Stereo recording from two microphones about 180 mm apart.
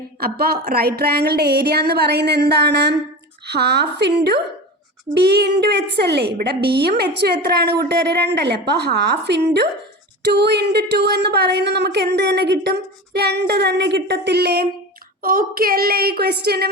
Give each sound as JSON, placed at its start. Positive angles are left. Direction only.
{"t": 0.2, "sound": "speech", "side_deg": -55}